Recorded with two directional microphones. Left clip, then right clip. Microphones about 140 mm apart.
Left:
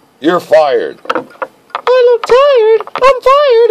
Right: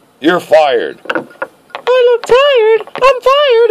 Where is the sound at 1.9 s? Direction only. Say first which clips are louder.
Left 1 dB; 20° right (ahead or behind).